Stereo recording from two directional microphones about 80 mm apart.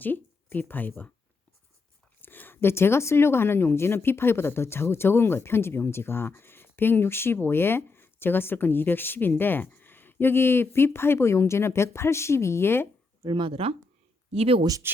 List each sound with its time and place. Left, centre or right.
0.0 s speech: left
2.2 s speech: left
13.2 s speech: right
14.8 s speech: right